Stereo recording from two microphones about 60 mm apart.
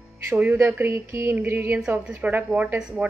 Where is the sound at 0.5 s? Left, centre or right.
Right.